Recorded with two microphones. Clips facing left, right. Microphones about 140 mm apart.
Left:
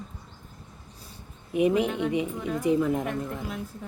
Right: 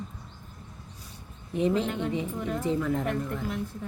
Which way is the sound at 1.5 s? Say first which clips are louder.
Left 3 dB; 15° left (ahead or behind).